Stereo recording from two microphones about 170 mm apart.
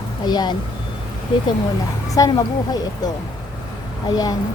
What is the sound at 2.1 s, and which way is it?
A woman's voice, 20° left (ahead or behind).